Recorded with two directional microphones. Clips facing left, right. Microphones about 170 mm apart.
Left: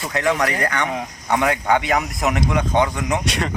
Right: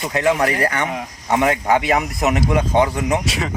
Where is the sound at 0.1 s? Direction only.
30° right (ahead or behind).